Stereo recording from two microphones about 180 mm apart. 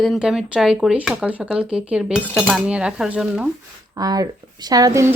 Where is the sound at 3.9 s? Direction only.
20° right (ahead or behind).